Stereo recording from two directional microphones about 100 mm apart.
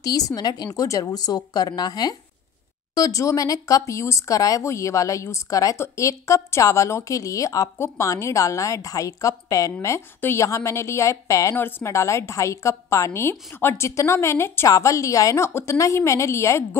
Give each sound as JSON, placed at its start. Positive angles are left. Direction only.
{"t": 0.0, "sound": "a woman's voice", "side_deg": 40}